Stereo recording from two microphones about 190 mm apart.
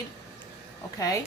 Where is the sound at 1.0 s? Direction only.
15° left (ahead or behind).